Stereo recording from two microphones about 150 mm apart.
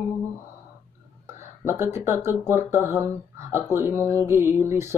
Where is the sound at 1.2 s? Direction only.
15° right (ahead or behind).